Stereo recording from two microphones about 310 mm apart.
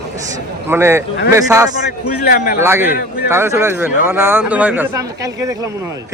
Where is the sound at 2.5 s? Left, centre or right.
Centre.